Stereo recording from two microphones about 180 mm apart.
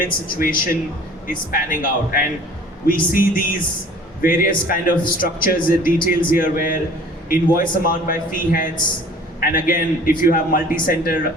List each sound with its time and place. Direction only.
0.0 s a man's voice: 50° left (ahead or behind)